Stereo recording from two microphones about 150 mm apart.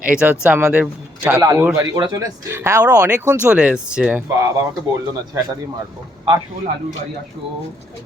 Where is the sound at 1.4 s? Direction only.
20° right (ahead or behind).